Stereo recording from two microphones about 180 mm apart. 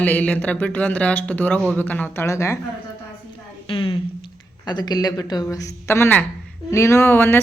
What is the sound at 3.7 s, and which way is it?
A woman's voice, 30° left (ahead or behind).